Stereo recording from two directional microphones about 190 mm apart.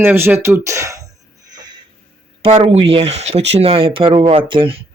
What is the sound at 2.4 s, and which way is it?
Speech, 30° right (ahead or behind).